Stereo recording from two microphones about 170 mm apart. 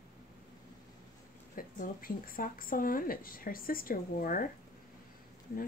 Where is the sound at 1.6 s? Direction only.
55° left (ahead or behind).